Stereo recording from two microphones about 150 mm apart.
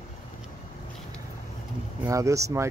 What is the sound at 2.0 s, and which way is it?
Speech, 20° right (ahead or behind).